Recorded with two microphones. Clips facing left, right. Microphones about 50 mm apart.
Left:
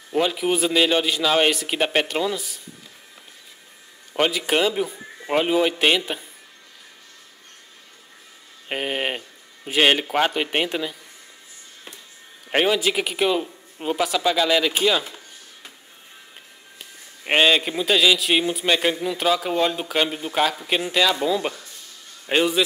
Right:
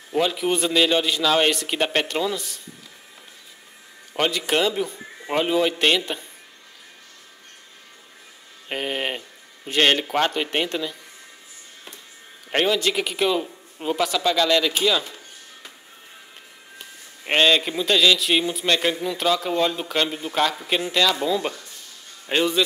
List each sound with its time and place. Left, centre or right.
0.1 s a man's voice: centre
4.1 s a man's voice: centre
8.6 s a man's voice: centre
12.4 s speech: centre
17.2 s a man's voice: centre